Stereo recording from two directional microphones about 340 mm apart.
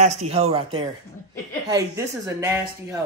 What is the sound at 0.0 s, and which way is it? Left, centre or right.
Speech, centre.